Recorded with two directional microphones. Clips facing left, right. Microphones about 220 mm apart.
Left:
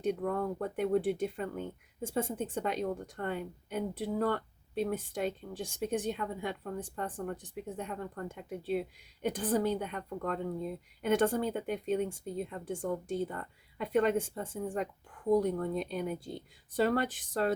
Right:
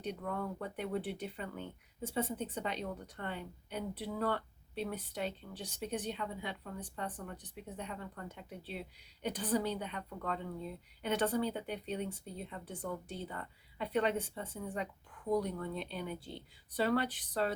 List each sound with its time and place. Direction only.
0.0 s speech: 50° left (ahead or behind)